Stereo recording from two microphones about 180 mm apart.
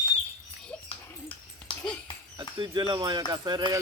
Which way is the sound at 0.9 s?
30° left (ahead or behind).